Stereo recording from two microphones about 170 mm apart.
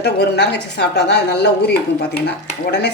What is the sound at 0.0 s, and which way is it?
A woman's voice, 80° left.